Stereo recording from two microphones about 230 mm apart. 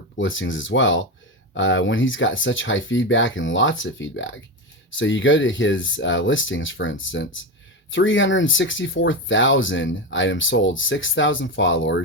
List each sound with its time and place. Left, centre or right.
0.2 s speech: left